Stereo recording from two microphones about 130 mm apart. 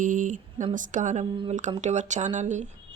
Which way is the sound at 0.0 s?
90° right.